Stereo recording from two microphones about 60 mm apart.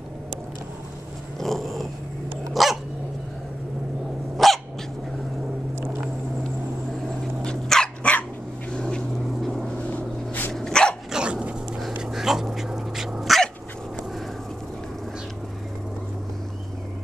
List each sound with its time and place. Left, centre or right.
1.4 s dog: centre
4.4 s dog: centre
7.1 s dog: centre
8.7 s a sound: centre
9.4 s vehicle: centre
9.8 s vehicle: left
10.5 s dog: centre
11.1 s dog: centre